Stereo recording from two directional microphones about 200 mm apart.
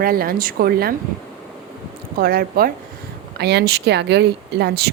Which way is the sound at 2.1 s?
50° right (ahead or behind).